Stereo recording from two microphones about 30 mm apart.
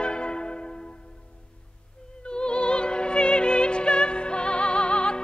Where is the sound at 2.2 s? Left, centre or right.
Left.